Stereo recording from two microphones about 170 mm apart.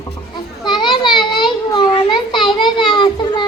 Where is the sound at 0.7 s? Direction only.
25° left (ahead or behind).